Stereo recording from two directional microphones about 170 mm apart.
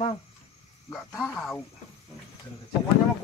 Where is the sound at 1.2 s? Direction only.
5° left (ahead or behind).